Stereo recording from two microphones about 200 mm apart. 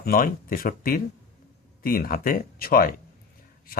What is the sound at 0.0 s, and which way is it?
Speech, 45° left (ahead or behind).